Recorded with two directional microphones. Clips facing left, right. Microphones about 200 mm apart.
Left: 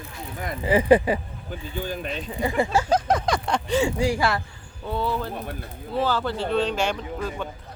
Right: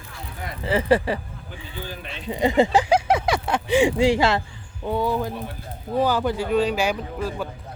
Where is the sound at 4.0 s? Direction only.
25° right (ahead or behind); by 7.5 s 5° right (ahead or behind).